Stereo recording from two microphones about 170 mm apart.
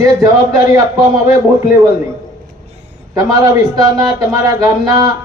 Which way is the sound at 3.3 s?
20° right (ahead or behind).